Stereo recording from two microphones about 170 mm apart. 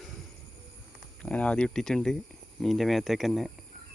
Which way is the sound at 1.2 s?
5° left (ahead or behind).